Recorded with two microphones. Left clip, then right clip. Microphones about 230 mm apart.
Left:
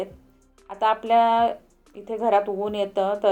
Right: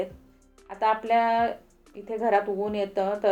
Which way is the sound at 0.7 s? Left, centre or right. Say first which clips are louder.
Left 3 dB; left.